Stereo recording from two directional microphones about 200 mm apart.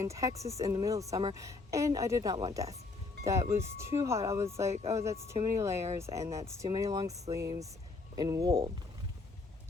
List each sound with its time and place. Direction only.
0.0 s speech: 15° right (ahead or behind)
4.7 s speech: 30° right (ahead or behind)
4.9 s speech: 15° right (ahead or behind)